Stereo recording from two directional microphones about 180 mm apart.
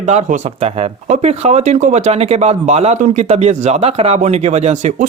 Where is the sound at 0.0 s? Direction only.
40° right (ahead or behind).